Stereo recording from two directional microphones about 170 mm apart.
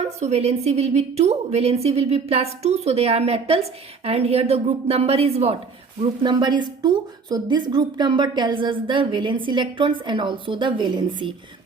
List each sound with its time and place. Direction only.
0.0 s a woman's voice: 40° right (ahead or behind)
6.0 s speech: 25° right (ahead or behind)